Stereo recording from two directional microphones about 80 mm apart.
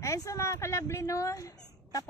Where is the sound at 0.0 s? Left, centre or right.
Left.